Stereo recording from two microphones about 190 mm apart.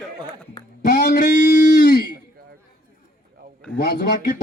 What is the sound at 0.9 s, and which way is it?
Speech, 60° left (ahead or behind).